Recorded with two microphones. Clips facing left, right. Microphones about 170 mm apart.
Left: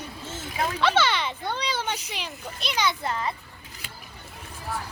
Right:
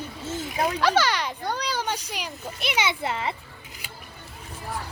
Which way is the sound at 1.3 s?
10° right (ahead or behind).